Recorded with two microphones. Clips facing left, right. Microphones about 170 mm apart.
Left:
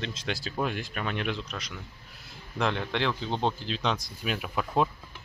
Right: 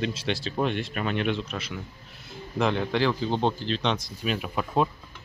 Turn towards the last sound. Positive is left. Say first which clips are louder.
# right 2 dB
turn(degrees=0)  # may be behind; listen again after turning